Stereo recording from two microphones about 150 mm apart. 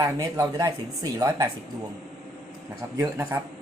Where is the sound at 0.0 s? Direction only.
20° right (ahead or behind).